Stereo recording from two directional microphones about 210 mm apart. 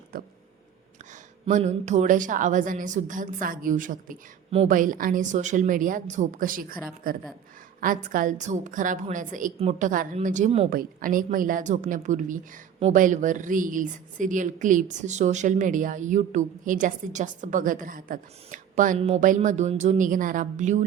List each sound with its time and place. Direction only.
0.1 s speech: 45° right (ahead or behind)
1.5 s speech: 35° right (ahead or behind)